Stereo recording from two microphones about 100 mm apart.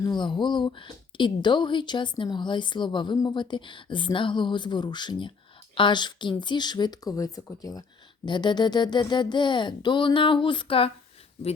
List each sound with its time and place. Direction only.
0.0 s speech: 50° left (ahead or behind)